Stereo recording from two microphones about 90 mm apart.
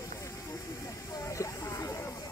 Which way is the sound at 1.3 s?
35° left (ahead or behind).